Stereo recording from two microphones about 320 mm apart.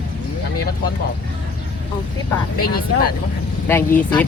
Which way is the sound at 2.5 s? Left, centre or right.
Left.